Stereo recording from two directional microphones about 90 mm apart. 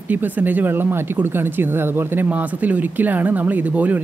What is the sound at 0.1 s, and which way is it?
Speech, 20° right (ahead or behind).